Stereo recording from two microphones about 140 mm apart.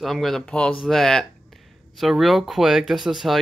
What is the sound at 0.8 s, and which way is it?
Speech, 5° left (ahead or behind).